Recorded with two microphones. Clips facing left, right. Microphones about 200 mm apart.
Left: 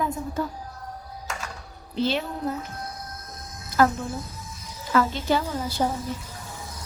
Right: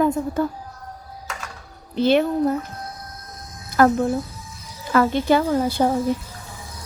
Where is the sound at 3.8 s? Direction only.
55° right (ahead or behind).